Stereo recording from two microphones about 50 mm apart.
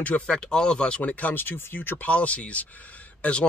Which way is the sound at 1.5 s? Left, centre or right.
Left.